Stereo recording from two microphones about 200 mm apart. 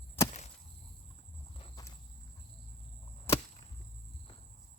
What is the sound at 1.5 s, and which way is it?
Walk, 30° left (ahead or behind).